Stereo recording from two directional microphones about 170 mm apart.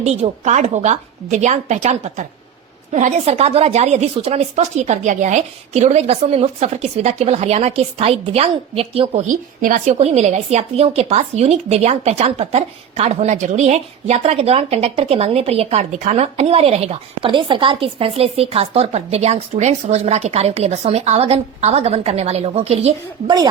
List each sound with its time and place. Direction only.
0.0 s a woman's voice: 40° right (ahead or behind)
9.3 s a woman's voice: 55° right (ahead or behind); by 23.3 s 35° right (ahead or behind)